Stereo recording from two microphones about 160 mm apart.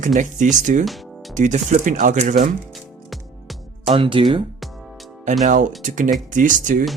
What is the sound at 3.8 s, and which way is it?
Speech, 30° right (ahead or behind).